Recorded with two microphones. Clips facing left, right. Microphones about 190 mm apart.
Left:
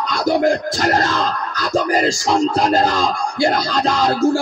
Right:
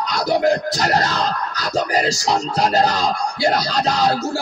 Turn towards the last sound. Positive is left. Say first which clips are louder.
# left 3 dB
turn(degrees=50)  # may be behind; listen again after turning